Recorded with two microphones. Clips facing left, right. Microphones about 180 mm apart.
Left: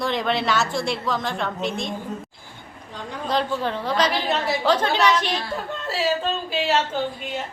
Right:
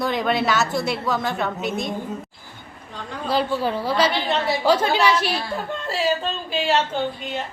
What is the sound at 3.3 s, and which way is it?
A woman's voice, 5° right (ahead or behind).